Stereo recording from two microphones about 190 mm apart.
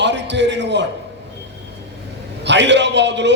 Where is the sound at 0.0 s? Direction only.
65° right (ahead or behind).